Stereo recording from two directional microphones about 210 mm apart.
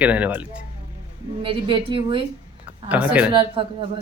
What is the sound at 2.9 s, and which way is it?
Speech, 5° right (ahead or behind).